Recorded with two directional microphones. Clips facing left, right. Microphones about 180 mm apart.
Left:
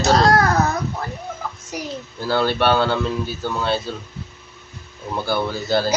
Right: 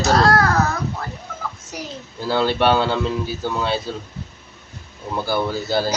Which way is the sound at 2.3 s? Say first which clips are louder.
Right 1 dB; 15° right (ahead or behind).